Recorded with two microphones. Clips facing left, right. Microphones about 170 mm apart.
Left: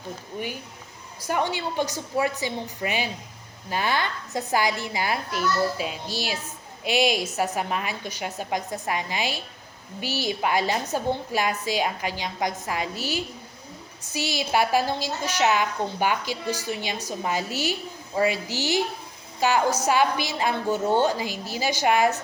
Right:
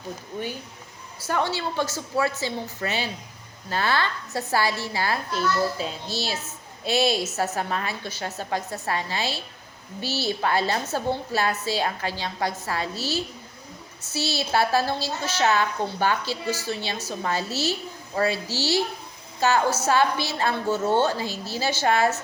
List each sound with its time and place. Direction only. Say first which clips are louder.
1.2 s a child's voice: even; 15° left (ahead or behind)